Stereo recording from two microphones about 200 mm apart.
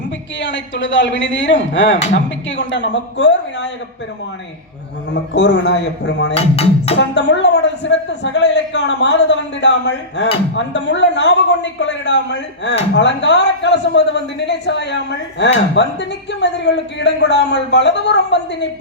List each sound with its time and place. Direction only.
0.3 s a man's voice: 65° left (ahead or behind)
5.3 s a man's voice: 60° left (ahead or behind)
6.3 s speech: 30° left (ahead or behind)
7.1 s a man's voice: 60° left (ahead or behind)